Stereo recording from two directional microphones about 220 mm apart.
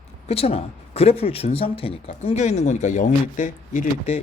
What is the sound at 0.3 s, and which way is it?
Speech, 25° left (ahead or behind).